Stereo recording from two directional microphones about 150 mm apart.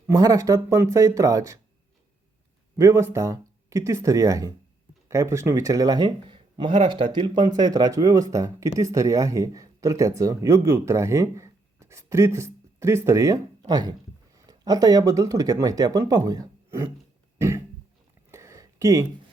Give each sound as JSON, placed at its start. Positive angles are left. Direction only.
{"t": 0.1, "sound": "speech", "side_deg": -25}
{"t": 2.7, "sound": "speech", "side_deg": -20}
{"t": 17.3, "sound": "a sound", "side_deg": -20}